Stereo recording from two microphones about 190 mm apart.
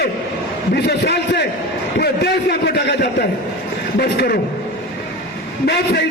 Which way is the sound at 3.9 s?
55° left (ahead or behind).